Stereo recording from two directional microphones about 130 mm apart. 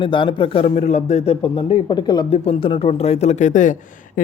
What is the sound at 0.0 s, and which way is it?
Speech, 40° left (ahead or behind).